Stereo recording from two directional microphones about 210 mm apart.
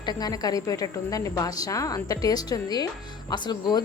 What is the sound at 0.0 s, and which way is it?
A woman's voice, 20° left (ahead or behind).